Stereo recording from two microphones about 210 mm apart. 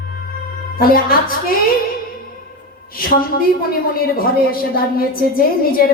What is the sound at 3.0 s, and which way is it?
A woman's voice, 45° left (ahead or behind).